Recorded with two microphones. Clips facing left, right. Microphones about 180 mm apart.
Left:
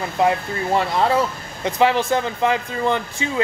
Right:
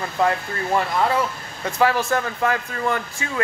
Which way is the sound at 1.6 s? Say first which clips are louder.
Left 2 dB; 20° left (ahead or behind).